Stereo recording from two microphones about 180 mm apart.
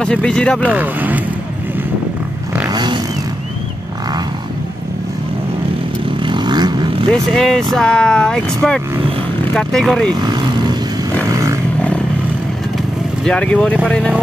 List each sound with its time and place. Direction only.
0.0 s speech: 5° left (ahead or behind)
0.6 s speech: 10° right (ahead or behind)
2.7 s vehicle: 25° right (ahead or behind)
6.1 s vehicle: 25° right (ahead or behind)
7.1 s speech: 5° left (ahead or behind)
10.2 s vehicle: 25° right (ahead or behind)
11.2 s a sound: 20° right (ahead or behind)
13.2 s speech: 5° left (ahead or behind)